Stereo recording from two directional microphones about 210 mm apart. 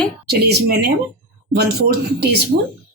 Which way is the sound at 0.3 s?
50° right (ahead or behind).